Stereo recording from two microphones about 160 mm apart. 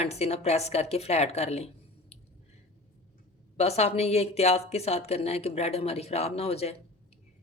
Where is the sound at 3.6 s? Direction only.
40° left (ahead or behind).